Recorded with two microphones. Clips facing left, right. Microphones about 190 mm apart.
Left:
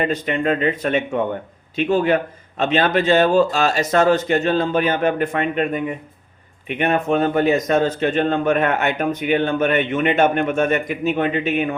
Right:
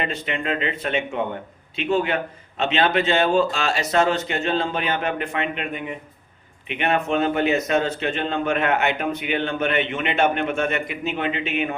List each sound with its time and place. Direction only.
0.0 s speech: 45° left (ahead or behind)
6.7 s speech: 45° left (ahead or behind)